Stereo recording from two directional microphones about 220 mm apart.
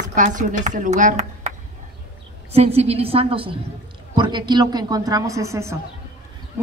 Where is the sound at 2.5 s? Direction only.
30° right (ahead or behind).